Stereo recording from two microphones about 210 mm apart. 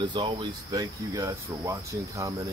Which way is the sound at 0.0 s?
20° right (ahead or behind).